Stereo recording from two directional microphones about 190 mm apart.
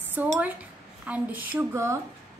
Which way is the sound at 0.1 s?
10° right (ahead or behind).